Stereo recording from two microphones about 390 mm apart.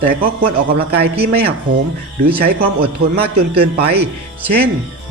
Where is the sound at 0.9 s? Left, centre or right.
Centre.